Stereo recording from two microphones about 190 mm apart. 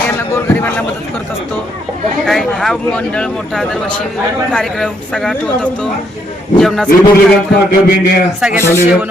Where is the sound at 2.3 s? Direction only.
Centre (ahead or behind).